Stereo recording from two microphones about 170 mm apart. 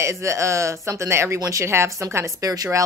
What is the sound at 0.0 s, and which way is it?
Speech, 15° right (ahead or behind).